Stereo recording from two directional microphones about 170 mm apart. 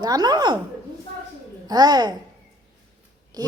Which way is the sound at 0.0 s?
25° right (ahead or behind).